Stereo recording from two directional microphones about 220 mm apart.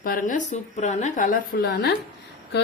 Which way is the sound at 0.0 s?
40° left (ahead or behind).